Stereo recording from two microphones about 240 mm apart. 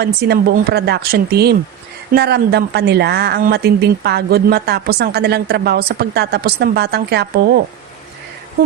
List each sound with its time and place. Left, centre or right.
0.0 s speech: right